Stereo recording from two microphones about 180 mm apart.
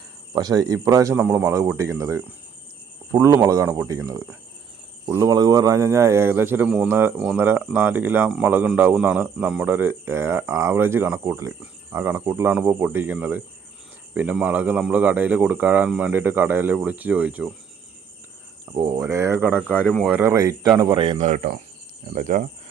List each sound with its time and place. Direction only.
0.3 s a man's voice: 20° right (ahead or behind)
18.7 s a man's voice: 20° right (ahead or behind)
19.9 s speech: 5° left (ahead or behind)
20.1 s a man's voice: 15° right (ahead or behind)
21.0 s speech: 30° right (ahead or behind)
21.2 s speech: 45° right (ahead or behind)